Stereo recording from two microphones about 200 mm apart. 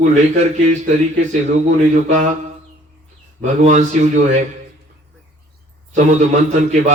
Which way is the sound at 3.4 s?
40° right (ahead or behind).